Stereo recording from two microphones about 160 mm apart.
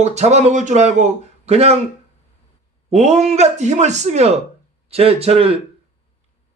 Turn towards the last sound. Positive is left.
turn(degrees=-40)  # may be behind; listen again after turning